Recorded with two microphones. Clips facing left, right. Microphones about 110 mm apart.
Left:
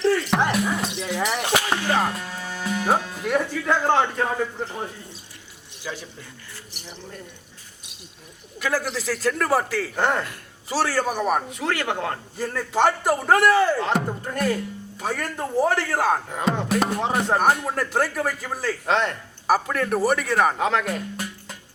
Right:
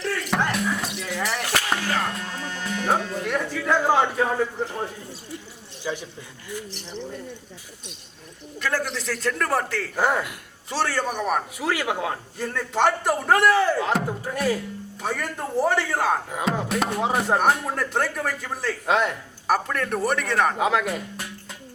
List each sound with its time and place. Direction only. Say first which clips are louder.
0.5 s music: left 2 dB; 5° left (ahead or behind)
0.9 s clip-clop: left 3 dB; 20° left (ahead or behind)
2.0 s music: left 1 dB; 5° left (ahead or behind)
5.8 s a man's voice: right 4 dB; 15° right (ahead or behind)
6.7 s speech: right 3 dB; 10° left (ahead or behind)
8.5 s speech: left 1 dB; 5° left (ahead or behind)